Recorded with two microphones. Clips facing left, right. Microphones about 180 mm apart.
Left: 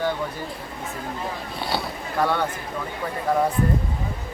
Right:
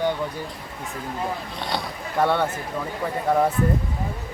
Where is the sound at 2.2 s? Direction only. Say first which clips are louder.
Right 2 dB; 25° right (ahead or behind).